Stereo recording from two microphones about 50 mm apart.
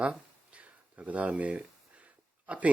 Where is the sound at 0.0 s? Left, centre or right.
Right.